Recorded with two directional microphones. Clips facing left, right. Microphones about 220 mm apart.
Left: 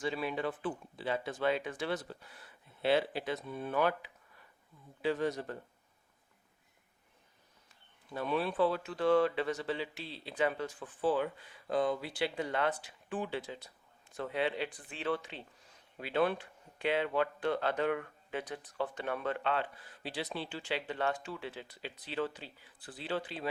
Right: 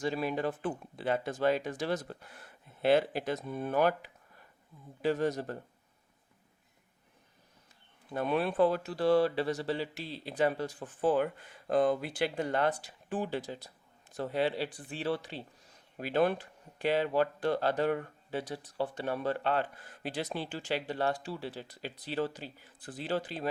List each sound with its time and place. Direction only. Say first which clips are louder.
0.0 s speech: right 3 dB; 40° right (ahead or behind)
8.1 s speech: right 3 dB; 55° right (ahead or behind)